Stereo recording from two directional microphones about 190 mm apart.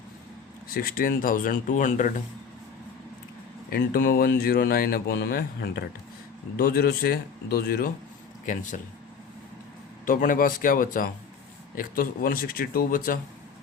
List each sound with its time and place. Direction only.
0.7 s speech: 50° left (ahead or behind)
3.7 s speech: 55° left (ahead or behind)
10.1 s speech: 45° left (ahead or behind)